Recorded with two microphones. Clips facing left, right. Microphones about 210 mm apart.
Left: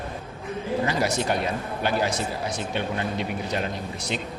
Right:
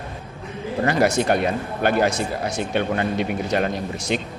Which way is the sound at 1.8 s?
55° right (ahead or behind).